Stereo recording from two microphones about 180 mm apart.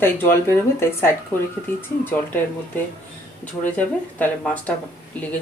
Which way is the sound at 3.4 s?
10° left (ahead or behind).